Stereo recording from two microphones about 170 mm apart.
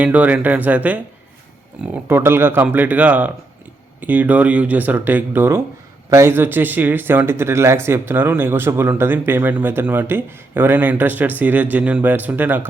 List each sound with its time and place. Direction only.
0.0 s speech: 10° right (ahead or behind)